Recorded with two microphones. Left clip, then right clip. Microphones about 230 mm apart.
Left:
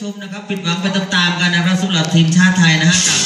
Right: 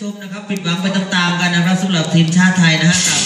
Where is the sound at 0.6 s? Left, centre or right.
Left.